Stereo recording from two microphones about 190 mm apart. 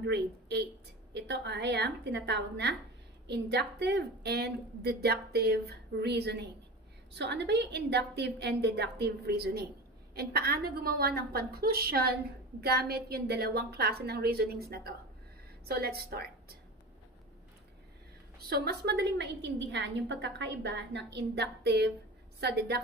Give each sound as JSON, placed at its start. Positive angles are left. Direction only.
{"t": 0.0, "sound": "a woman's voice", "side_deg": -60}
{"t": 18.5, "sound": "a woman's voice", "side_deg": -55}